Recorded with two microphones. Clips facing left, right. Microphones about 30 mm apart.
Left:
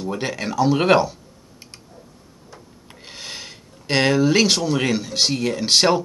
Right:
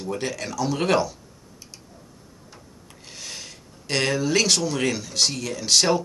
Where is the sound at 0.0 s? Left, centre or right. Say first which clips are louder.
Left 3 dB; left.